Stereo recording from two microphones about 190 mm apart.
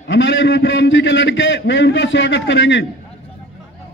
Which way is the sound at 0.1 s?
70° left (ahead or behind).